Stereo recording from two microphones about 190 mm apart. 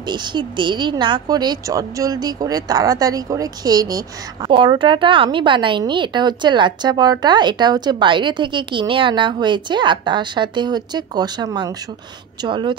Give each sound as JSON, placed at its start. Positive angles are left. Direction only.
{"t": 0.0, "sound": "speech", "side_deg": -25}